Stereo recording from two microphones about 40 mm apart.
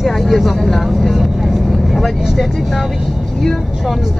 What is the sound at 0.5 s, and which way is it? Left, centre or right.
Speech, centre.